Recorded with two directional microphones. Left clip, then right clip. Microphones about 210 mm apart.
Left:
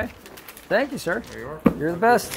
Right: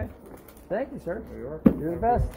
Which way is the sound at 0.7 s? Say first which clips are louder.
Left 8 dB; 65° left (ahead or behind).